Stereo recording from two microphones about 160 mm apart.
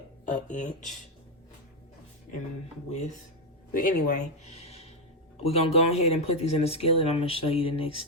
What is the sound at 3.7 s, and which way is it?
Speech, 55° left (ahead or behind).